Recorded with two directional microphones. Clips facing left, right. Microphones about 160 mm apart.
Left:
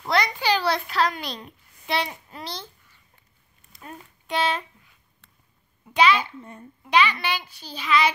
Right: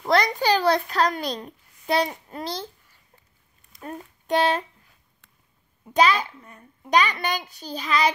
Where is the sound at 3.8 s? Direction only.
45° right (ahead or behind).